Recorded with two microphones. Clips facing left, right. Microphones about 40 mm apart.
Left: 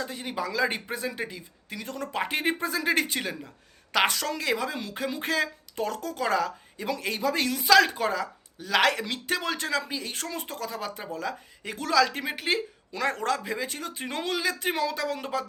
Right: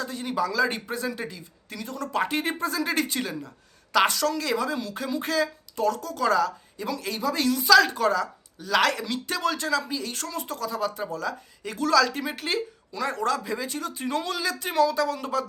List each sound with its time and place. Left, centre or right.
0.0 s speech: left
1.8 s speech: left
2.1 s speech: left
12.9 s speech: left